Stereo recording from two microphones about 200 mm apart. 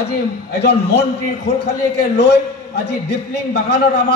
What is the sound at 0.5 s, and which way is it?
A man's voice, 55° left (ahead or behind).